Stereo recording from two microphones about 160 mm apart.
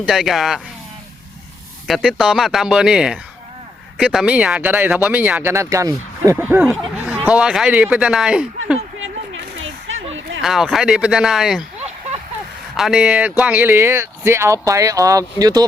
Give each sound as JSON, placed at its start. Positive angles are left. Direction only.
{"t": 0.1, "sound": "speech", "side_deg": 0}
{"t": 1.9, "sound": "speech", "side_deg": 0}
{"t": 10.4, "sound": "speech", "side_deg": 0}
{"t": 12.7, "sound": "speech", "side_deg": 0}